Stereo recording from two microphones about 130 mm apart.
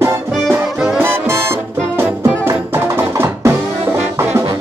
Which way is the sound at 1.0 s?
20° right (ahead or behind).